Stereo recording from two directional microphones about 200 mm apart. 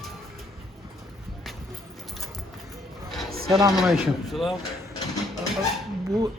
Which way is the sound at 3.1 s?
Centre (ahead or behind).